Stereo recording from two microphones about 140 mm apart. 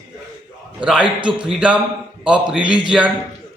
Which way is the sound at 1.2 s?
35° right (ahead or behind).